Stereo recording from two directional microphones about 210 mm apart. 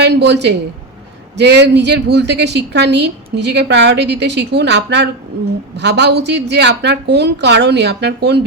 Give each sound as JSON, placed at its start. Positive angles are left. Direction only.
{"t": 0.0, "sound": "a woman's voice", "side_deg": -55}